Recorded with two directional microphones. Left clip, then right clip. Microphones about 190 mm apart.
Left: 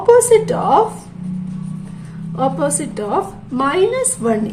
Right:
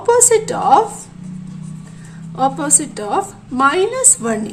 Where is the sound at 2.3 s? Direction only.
30° right (ahead or behind).